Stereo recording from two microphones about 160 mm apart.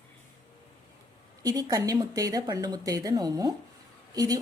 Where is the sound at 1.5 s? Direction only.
25° right (ahead or behind).